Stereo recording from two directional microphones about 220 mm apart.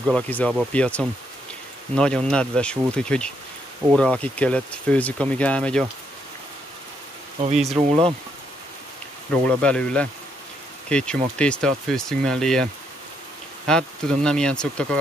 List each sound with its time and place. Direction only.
0.0 s speech: 5° left (ahead or behind)
7.7 s speech: 25° right (ahead or behind)
9.5 s speech: 5° left (ahead or behind)
13.7 s speech: 5° left (ahead or behind)